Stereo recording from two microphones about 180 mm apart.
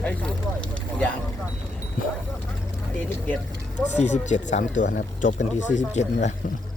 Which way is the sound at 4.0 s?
40° left (ahead or behind).